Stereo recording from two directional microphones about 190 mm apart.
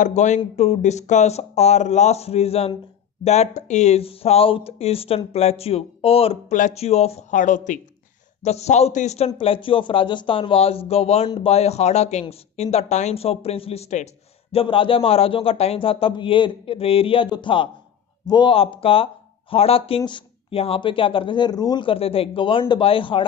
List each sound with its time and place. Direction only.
0.0 s speech: 40° left (ahead or behind)